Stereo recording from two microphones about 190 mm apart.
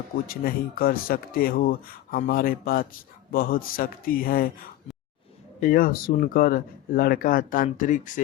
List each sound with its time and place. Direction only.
0.3 s speech: 50° left (ahead or behind)
5.5 s speech: 45° left (ahead or behind)